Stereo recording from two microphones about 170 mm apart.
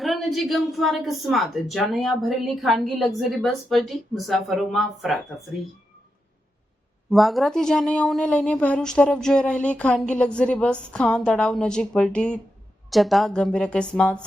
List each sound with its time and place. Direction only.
0.0 s a woman's voice: centre (ahead or behind)
7.1 s a woman's voice: centre (ahead or behind)